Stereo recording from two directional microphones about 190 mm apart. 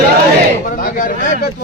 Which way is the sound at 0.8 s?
45° left (ahead or behind).